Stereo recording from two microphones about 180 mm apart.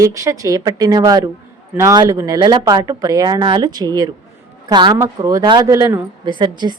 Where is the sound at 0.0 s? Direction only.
15° right (ahead or behind).